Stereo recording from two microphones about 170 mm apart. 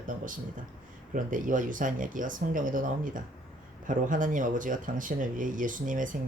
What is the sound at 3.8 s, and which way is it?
Speech, 50° right (ahead or behind).